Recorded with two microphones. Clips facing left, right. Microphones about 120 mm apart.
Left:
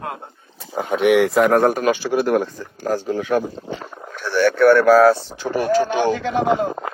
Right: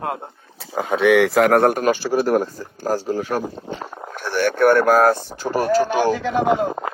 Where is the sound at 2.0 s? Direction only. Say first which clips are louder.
Even; 40° right (ahead or behind).